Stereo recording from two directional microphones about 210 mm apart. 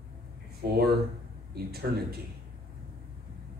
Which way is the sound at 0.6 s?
45° right (ahead or behind).